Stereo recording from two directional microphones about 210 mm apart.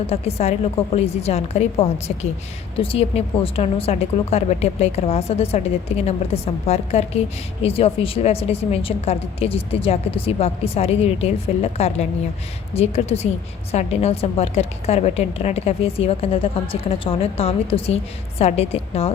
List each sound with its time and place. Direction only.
0.1 s a woman's voice: 30° left (ahead or behind)